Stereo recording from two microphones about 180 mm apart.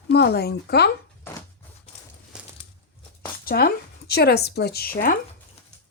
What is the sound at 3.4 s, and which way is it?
Speech, 60° left (ahead or behind).